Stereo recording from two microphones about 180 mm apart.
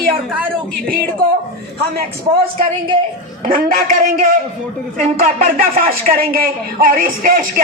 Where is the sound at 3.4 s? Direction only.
50° right (ahead or behind).